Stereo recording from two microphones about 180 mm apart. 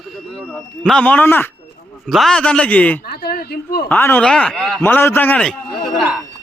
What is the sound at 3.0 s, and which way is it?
Speech, 60° left (ahead or behind).